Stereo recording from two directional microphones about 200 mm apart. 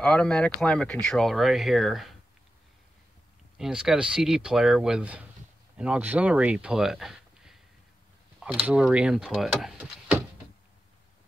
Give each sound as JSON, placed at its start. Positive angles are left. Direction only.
{"t": 0.0, "sound": "speech", "side_deg": 5}
{"t": 3.5, "sound": "speech", "side_deg": 0}